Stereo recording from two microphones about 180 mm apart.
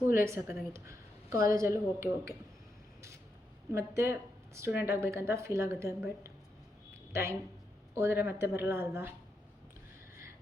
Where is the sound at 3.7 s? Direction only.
15° right (ahead or behind).